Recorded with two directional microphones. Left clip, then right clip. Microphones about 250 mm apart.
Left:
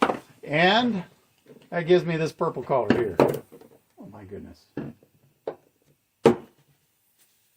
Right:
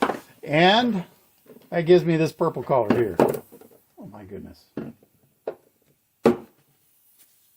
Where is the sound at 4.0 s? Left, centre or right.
Right.